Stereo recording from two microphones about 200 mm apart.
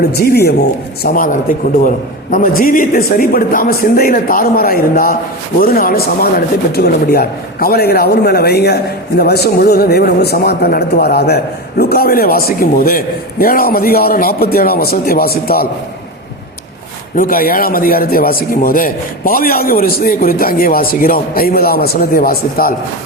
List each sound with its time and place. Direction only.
0.1 s speech: 50° left (ahead or behind)
17.2 s speech: 45° left (ahead or behind)